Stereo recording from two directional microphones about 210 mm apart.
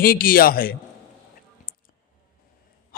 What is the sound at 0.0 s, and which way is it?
Speech, 45° left (ahead or behind).